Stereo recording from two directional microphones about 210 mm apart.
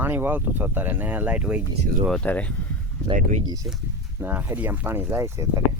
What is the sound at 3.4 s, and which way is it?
Speech, 15° right (ahead or behind).